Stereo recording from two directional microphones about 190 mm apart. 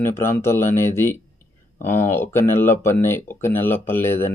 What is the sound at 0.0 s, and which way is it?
Speech, 15° left (ahead or behind).